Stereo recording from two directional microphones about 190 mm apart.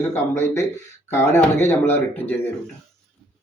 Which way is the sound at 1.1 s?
10° left (ahead or behind).